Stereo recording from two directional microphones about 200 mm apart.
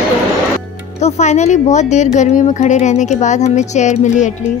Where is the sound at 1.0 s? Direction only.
35° left (ahead or behind).